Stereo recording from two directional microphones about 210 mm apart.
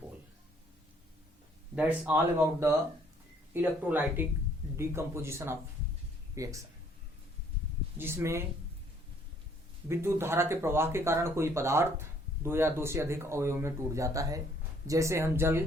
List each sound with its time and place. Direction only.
1.7 s speech: 5° right (ahead or behind)
7.9 s speech: 10° right (ahead or behind)
9.9 s speech: 10° right (ahead or behind)